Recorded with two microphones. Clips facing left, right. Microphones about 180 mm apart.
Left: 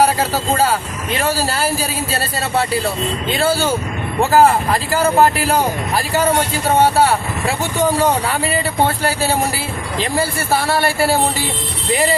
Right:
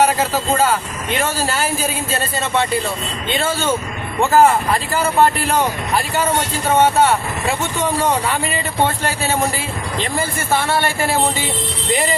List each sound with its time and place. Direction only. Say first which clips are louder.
1.5 s speech: left 1 dB; 35° left (ahead or behind)
10.2 s speech: left 2 dB; 35° left (ahead or behind)